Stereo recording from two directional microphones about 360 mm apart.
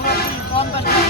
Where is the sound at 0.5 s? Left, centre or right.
Centre.